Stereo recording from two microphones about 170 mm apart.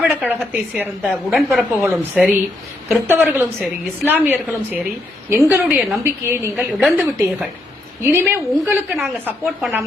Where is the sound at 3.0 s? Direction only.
15° right (ahead or behind).